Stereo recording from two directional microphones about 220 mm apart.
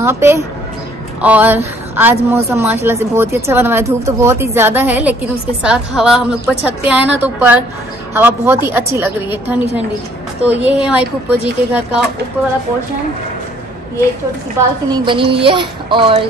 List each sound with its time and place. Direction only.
0.0 s a woman's voice: 10° right (ahead or behind)
14.6 s a woman's voice: 10° right (ahead or behind)
14.9 s a child's voice: 25° right (ahead or behind)